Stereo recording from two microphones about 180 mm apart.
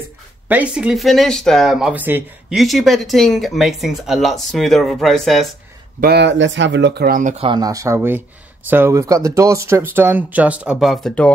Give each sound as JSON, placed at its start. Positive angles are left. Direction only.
{"t": 0.5, "sound": "speech", "side_deg": -5}
{"t": 5.9, "sound": "speech", "side_deg": -65}
{"t": 7.4, "sound": "speech", "side_deg": -20}